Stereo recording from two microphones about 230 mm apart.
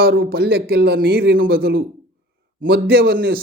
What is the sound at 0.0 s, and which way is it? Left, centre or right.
A man's voice, right.